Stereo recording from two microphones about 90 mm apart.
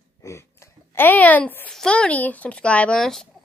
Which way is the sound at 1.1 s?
20° left (ahead or behind).